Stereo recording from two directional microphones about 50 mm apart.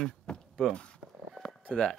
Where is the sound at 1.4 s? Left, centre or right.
Centre.